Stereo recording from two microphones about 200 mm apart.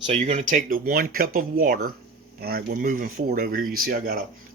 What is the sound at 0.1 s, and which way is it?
Speech, 35° right (ahead or behind).